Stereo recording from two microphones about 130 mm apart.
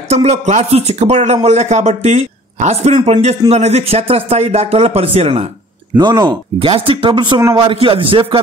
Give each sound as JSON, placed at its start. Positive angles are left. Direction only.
{"t": 0.1, "sound": "speech", "side_deg": -55}
{"t": 5.9, "sound": "speech", "side_deg": -35}